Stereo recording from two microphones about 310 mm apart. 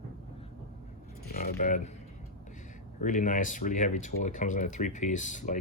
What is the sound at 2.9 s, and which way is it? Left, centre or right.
Speech, left.